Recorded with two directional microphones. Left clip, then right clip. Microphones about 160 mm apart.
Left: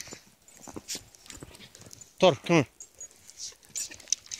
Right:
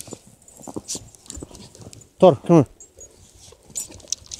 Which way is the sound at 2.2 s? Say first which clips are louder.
Right 8 dB; 5° left (ahead or behind).